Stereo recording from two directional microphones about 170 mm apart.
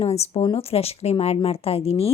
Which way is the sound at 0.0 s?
40° left (ahead or behind).